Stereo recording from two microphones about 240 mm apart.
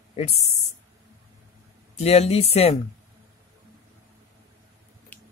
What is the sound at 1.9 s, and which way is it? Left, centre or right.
Speech, left.